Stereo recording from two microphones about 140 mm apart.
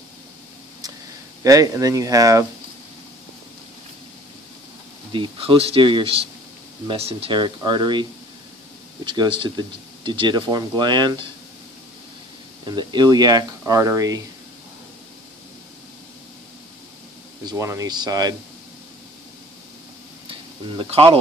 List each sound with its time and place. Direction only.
1.4 s speech: 25° right (ahead or behind)
5.1 s speech: 35° right (ahead or behind)
12.6 s speech: 30° right (ahead or behind)
17.5 s speech: 25° right (ahead or behind)
20.2 s a sound: 40° right (ahead or behind)